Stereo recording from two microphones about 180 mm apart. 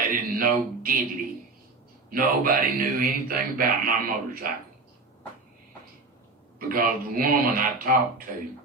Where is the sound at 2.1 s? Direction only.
50° right (ahead or behind).